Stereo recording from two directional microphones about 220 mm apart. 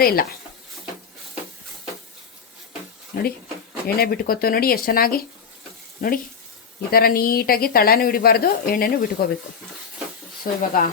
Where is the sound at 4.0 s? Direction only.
40° left (ahead or behind).